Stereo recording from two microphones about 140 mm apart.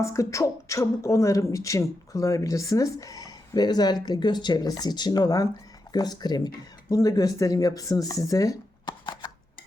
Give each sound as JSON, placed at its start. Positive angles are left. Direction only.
{"t": 0.0, "sound": "speech", "side_deg": 20}